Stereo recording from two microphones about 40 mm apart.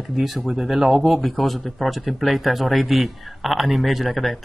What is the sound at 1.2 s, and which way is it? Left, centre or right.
Speech, centre.